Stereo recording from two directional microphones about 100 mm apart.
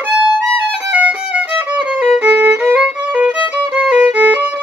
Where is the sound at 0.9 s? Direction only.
15° right (ahead or behind).